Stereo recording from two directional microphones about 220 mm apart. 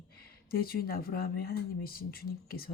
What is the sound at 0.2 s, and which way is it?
A woman's voice, 45° left (ahead or behind).